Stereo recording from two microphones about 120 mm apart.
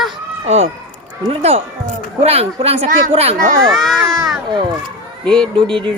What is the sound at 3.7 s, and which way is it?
Speech, centre (ahead or behind).